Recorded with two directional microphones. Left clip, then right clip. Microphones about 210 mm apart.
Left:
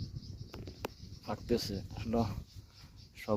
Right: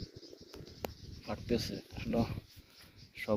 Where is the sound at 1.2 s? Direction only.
30° left (ahead or behind).